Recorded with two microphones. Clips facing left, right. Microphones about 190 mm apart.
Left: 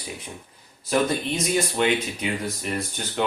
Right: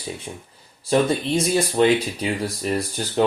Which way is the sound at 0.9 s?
30° right (ahead or behind).